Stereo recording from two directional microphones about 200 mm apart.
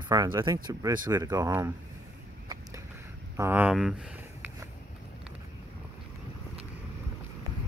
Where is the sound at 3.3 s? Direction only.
10° right (ahead or behind).